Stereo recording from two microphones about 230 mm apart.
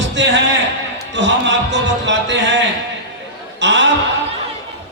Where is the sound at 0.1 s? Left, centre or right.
Right.